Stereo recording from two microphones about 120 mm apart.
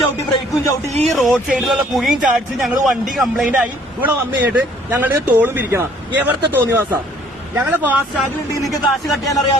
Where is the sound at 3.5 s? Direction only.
15° right (ahead or behind).